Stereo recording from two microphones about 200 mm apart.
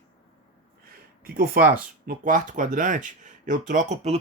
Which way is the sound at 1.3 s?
45° right (ahead or behind).